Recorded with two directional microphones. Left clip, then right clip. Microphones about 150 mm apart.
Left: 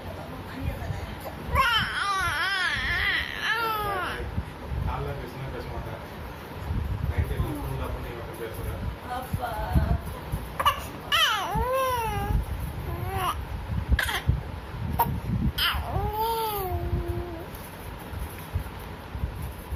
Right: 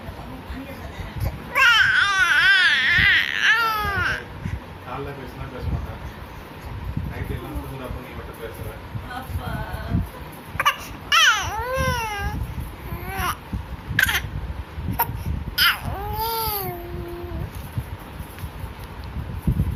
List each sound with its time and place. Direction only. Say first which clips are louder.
1.5 s baby cry: right 9 dB; 20° left (ahead or behind)
10.6 s baby cry: right 3 dB; 30° left (ahead or behind)
14.0 s a sound: right 9 dB; 20° left (ahead or behind)
15.5 s babbling: right 8 dB; 20° left (ahead or behind)